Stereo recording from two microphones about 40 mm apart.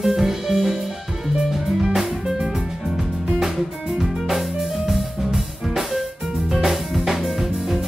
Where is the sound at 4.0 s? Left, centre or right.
Centre.